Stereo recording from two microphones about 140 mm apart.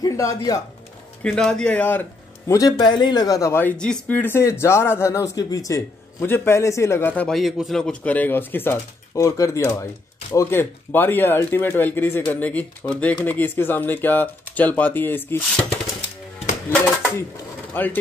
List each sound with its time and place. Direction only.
0.0 s speech: 25° left (ahead or behind)
1.2 s speech: 5° left (ahead or behind)
2.5 s speech: 30° left (ahead or behind)
7.2 s speech: centre (ahead or behind); by 15.6 s 15° left (ahead or behind)
17.8 s speech: 15° left (ahead or behind)